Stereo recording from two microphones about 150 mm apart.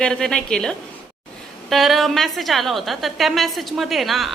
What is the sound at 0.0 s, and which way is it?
A woman's voice, 5° left (ahead or behind).